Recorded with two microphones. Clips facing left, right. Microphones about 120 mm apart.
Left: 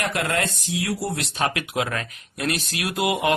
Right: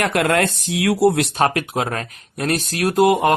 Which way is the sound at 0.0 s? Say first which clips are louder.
Right 7 dB; 65° right (ahead or behind).